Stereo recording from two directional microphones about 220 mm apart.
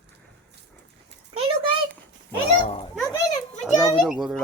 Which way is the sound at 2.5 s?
25° left (ahead or behind).